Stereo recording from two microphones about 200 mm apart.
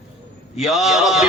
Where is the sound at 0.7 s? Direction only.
Centre (ahead or behind).